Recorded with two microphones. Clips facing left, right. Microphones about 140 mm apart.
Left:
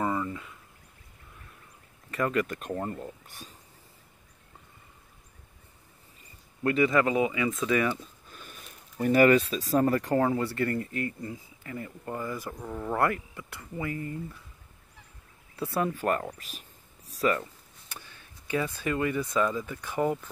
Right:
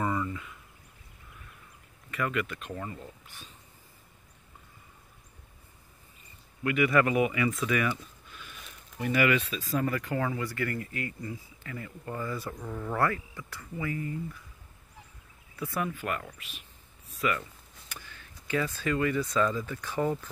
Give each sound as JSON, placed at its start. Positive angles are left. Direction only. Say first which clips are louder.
{"t": 0.0, "sound": "a sound", "louder": "left 1 dB", "side_deg": 25}
{"t": 2.0, "sound": "speech", "louder": "left 4 dB", "side_deg": 35}
{"t": 6.6, "sound": "speech", "louder": "left 3 dB", "side_deg": 35}
{"t": 6.9, "sound": "speech", "louder": "even", "side_deg": 25}
{"t": 13.9, "sound": "speech", "louder": "right 1 dB", "side_deg": 35}
{"t": 15.5, "sound": "speech", "louder": "left 4 dB", "side_deg": 30}